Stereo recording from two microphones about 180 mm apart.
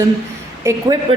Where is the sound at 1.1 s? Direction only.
30° right (ahead or behind).